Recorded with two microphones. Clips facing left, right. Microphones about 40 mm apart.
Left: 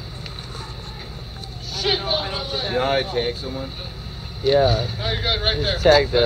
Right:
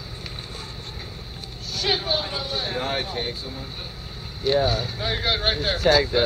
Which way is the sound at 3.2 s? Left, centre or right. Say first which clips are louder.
Left 6 dB; left.